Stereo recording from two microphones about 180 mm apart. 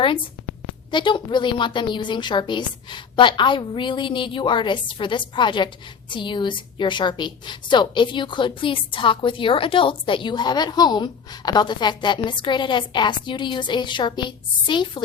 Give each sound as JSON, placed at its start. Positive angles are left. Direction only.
{"t": 0.9, "sound": "a woman's voice", "side_deg": 25}